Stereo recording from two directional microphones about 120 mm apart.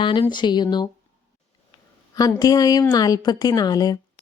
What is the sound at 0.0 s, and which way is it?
Speech, 40° left (ahead or behind).